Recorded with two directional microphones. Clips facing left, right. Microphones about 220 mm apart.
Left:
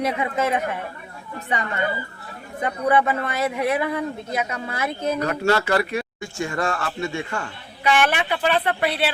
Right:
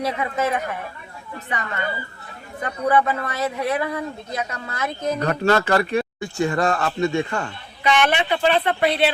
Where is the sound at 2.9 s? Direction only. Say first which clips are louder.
Even; 25° left (ahead or behind).